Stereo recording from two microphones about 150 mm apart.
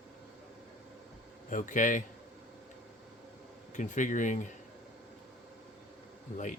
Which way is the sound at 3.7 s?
55° left (ahead or behind).